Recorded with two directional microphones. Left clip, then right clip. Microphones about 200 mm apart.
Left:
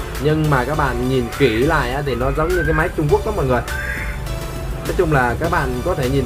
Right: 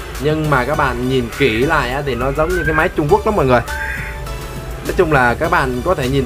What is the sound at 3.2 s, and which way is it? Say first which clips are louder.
Speech: right 6 dB; 30° right (ahead or behind).